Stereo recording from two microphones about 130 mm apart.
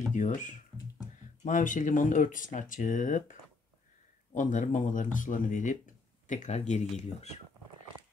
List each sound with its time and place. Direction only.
0.1 s speech: 75° left (ahead or behind)